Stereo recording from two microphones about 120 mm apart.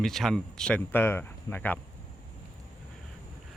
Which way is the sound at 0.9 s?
20° left (ahead or behind).